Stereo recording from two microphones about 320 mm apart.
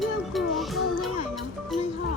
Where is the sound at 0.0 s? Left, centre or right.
Centre.